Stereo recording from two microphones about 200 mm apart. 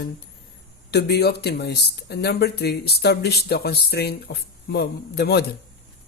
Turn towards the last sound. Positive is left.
turn(degrees=55)  # may be behind; listen again after turning